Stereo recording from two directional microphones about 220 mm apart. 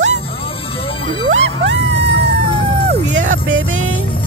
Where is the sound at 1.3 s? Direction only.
55° right (ahead or behind).